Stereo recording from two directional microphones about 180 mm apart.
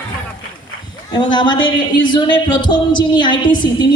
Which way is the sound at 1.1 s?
25° left (ahead or behind).